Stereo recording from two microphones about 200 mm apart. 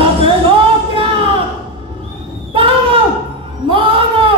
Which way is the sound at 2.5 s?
25° right (ahead or behind).